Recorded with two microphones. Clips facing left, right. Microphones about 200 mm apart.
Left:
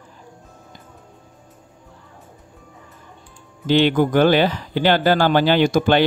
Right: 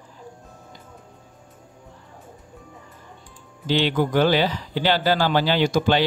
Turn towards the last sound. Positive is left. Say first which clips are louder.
# left 4 dB
turn(degrees=55)  # may be behind; listen again after turning